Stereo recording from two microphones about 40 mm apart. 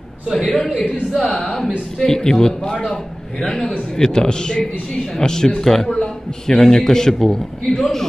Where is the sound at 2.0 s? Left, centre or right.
Centre.